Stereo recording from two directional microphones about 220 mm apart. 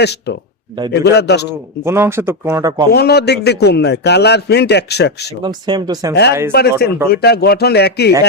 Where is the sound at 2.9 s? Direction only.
45° left (ahead or behind).